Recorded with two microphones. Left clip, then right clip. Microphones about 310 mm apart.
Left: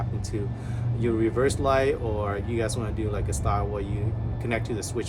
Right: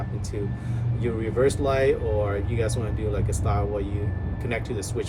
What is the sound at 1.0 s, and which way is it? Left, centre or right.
Speech, centre.